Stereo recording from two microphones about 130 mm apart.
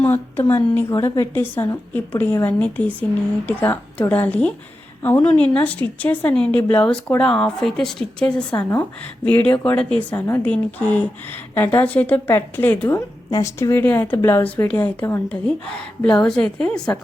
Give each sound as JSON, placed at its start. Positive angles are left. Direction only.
{"t": 0.0, "sound": "a woman's voice", "side_deg": 15}
{"t": 16.0, "sound": "a woman's voice", "side_deg": 5}